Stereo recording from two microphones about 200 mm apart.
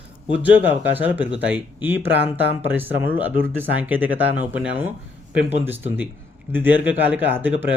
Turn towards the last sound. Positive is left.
turn(degrees=-10)  # may be behind; listen again after turning